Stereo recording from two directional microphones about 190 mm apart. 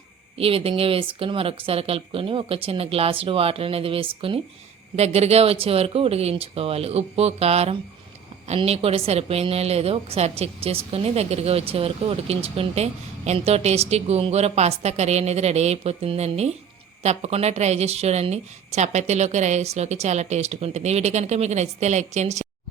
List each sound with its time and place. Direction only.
0.3 s a woman's voice: 30° right (ahead or behind)